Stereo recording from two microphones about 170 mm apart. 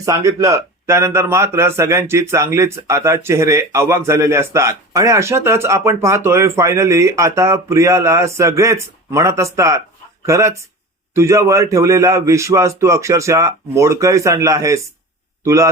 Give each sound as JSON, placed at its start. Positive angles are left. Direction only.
{"t": 0.0, "sound": "a man's voice", "side_deg": -20}